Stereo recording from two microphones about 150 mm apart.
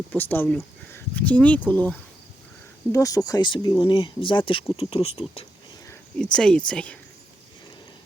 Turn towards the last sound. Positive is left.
turn(degrees=5)  # may be behind; listen again after turning